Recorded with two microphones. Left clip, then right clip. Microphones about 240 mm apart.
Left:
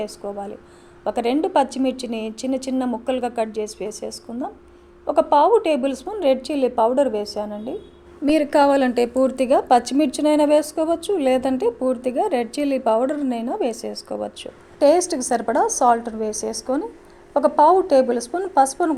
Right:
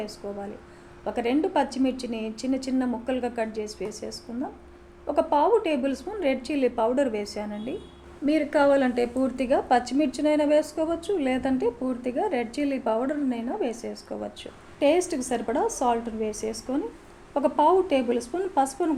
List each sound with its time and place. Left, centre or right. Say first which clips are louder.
0.2 s a woman's voice: left 6 dB; left; by 7.4 s centre
8.2 s a woman's voice: left 6 dB; left
14.8 s a woman's voice: left 6 dB; centre
15.6 s a woman's voice: left 8 dB; left